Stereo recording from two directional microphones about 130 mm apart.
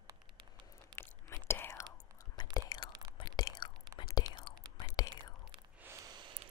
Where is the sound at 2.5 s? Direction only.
35° left (ahead or behind).